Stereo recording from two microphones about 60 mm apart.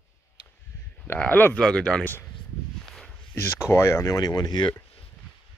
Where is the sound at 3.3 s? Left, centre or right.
Left.